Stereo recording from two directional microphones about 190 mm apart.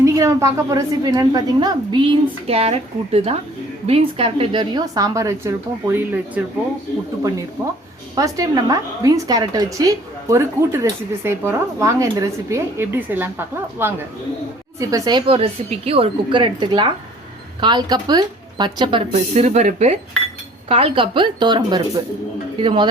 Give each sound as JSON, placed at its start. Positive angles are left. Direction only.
{"t": 0.0, "sound": "a woman's voice", "side_deg": -15}
{"t": 7.6, "sound": "a woman's voice", "side_deg": -20}
{"t": 19.1, "sound": "a woman's voice", "side_deg": -40}